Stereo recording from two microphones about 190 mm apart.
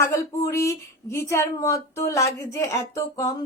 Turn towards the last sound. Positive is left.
turn(degrees=15)  # may be behind; listen again after turning